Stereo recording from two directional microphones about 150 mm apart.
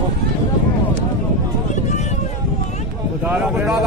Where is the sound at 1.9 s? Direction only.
50° left (ahead or behind).